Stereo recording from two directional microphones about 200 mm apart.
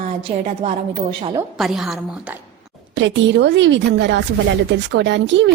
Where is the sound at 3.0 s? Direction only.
65° right (ahead or behind).